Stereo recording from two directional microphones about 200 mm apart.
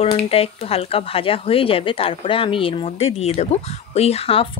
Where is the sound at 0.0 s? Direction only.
30° left (ahead or behind).